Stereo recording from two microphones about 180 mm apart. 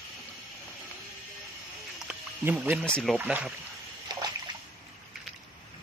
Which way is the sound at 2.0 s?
5° right (ahead or behind).